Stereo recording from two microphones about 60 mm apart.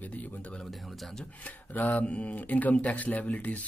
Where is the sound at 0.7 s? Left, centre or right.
Centre.